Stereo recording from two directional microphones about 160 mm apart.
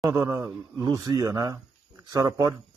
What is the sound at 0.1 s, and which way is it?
Speech, 20° right (ahead or behind).